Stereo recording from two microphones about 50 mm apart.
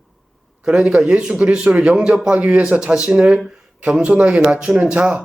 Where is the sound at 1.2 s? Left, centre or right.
Centre.